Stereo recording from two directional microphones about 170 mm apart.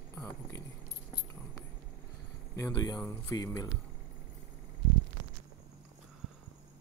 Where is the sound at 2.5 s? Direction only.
20° left (ahead or behind).